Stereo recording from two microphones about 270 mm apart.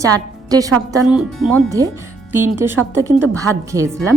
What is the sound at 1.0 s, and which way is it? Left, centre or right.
A woman's voice, centre.